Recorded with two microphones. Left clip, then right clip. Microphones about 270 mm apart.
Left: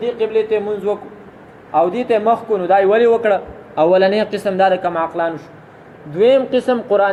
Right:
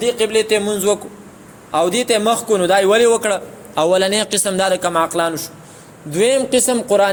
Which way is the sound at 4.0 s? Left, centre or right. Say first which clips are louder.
Left 2 dB; right.